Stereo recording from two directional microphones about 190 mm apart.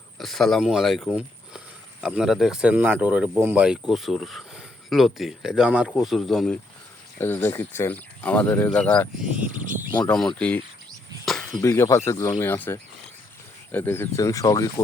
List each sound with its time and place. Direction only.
0.2 s speech: centre (ahead or behind); by 14.7 s 20° left (ahead or behind)